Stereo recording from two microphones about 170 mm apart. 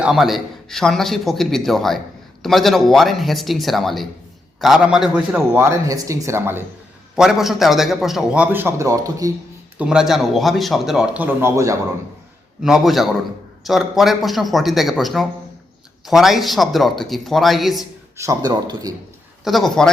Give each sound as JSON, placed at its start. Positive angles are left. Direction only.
{"t": 0.0, "sound": "a man's voice", "side_deg": 0}
{"t": 7.2, "sound": "a man's voice", "side_deg": 0}
{"t": 9.7, "sound": "a man's voice", "side_deg": -5}
{"t": 12.6, "sound": "a man's voice", "side_deg": 0}
{"t": 18.2, "sound": "speech", "side_deg": -20}
{"t": 19.5, "sound": "a man's voice", "side_deg": 0}